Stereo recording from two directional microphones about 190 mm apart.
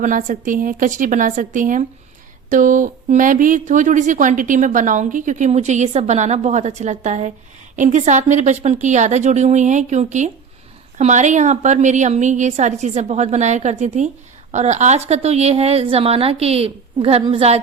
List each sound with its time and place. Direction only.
0.0 s a woman's voice: 40° right (ahead or behind)